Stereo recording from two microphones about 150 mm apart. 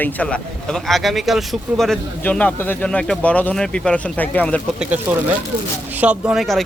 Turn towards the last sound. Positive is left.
turn(degrees=0)  # may be behind; listen again after turning